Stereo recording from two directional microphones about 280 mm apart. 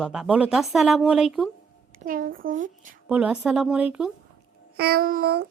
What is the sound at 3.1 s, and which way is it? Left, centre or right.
Speech, centre.